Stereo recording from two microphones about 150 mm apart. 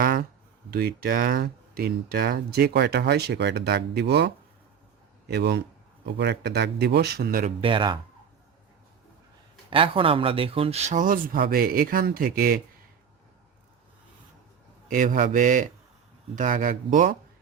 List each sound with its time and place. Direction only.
0.0 s a sound: 90° right
0.7 s speech: 90° right
5.3 s speech: 90° right; by 7.5 s 70° right (ahead or behind)
7.6 s a man's voice: 35° right (ahead or behind)
9.6 s speech: 35° right (ahead or behind); by 12.5 s 70° right (ahead or behind)
14.8 s speech: 65° right (ahead or behind)